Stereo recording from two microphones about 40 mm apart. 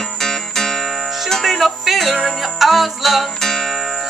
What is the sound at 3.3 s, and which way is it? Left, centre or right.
Music, centre.